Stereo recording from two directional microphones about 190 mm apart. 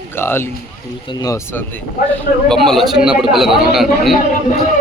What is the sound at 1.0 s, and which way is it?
Speech, 15° left (ahead or behind).